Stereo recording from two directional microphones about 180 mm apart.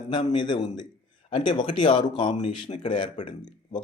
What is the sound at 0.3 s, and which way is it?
Speech, 25° left (ahead or behind).